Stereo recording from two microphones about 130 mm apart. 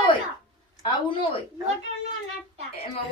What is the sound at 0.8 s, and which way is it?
Speech, 40° left (ahead or behind).